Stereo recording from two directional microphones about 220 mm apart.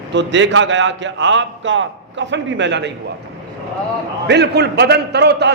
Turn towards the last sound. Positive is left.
turn(degrees=-50)  # may be behind; listen again after turning